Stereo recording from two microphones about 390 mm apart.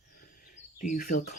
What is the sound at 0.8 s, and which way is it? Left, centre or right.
Speech, left.